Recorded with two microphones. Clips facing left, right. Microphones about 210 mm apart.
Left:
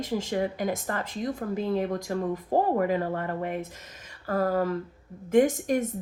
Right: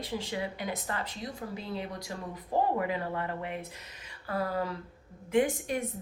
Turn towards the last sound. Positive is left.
turn(degrees=45)  # may be behind; listen again after turning